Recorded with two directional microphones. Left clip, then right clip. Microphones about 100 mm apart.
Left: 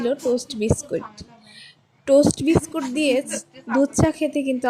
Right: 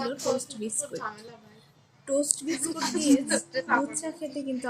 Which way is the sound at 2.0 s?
90° left.